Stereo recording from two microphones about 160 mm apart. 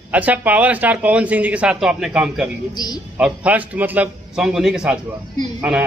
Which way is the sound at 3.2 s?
10° right (ahead or behind).